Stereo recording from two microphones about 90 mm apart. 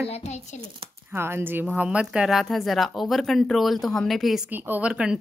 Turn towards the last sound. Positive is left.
turn(degrees=-10)  # may be behind; listen again after turning